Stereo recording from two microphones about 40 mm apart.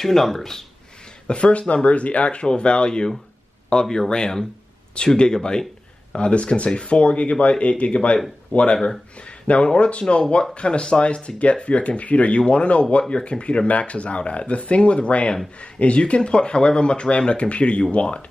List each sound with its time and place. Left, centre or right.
0.0 s speech: centre
1.2 s speech: left
9.8 s speech: left